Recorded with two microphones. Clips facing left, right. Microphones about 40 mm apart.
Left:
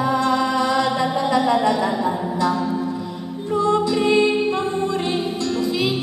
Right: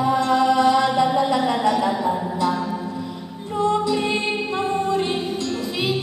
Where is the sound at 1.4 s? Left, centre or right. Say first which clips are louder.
Left 1 dB; left.